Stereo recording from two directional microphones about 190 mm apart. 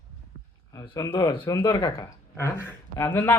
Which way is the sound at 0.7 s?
20° left (ahead or behind).